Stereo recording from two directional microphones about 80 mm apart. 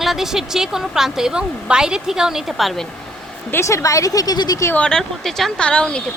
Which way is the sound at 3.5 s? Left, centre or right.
Left.